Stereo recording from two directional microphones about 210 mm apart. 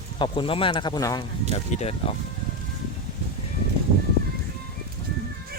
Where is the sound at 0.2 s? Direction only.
25° left (ahead or behind).